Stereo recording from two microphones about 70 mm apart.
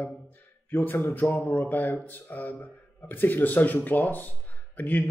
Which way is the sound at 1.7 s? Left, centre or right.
Left.